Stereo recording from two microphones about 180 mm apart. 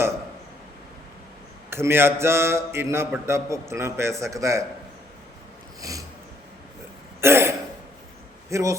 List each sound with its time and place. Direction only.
1.7 s mantra: 15° right (ahead or behind)
5.8 s a sound: 20° right (ahead or behind)
7.2 s throat clearing: 15° right (ahead or behind)
8.4 s speech: 15° right (ahead or behind)